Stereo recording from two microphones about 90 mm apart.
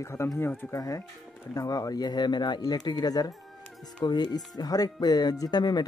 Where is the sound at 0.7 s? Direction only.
35° left (ahead or behind).